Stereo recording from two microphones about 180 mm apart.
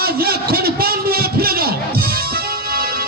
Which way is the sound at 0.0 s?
55° right (ahead or behind).